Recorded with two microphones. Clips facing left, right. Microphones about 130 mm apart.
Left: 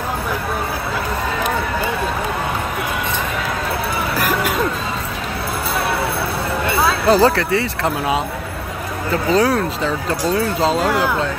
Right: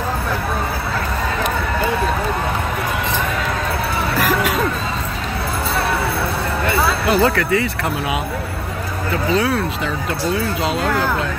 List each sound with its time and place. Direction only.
4.2 s music: centre (ahead or behind)
7.1 s speech: 30° left (ahead or behind)
9.3 s speech: 40° left (ahead or behind)
10.8 s speech: 5° left (ahead or behind)